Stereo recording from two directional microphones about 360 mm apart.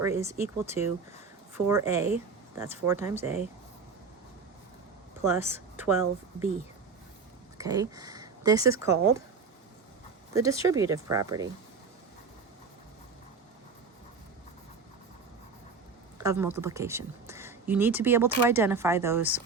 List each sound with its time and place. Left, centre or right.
0.0 s speech: centre
5.2 s a woman's voice: centre
7.6 s speech: centre
10.3 s speech: centre
16.1 s speech: centre